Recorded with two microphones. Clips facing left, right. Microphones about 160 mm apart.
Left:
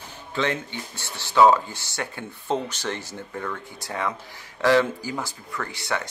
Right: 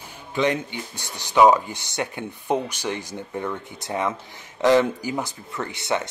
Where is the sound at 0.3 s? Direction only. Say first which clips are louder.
Right 4 dB; 15° right (ahead or behind).